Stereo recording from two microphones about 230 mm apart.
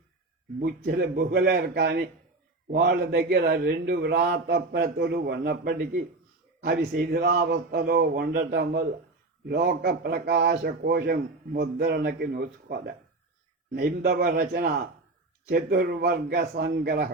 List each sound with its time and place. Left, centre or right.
0.9 s a man's voice: right